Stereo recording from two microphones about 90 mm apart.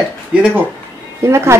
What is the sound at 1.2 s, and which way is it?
Speech, 30° right (ahead or behind).